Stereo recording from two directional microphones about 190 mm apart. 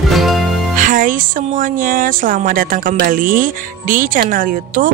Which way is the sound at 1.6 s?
45° right (ahead or behind).